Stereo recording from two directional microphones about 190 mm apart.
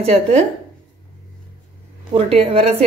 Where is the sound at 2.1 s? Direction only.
30° right (ahead or behind).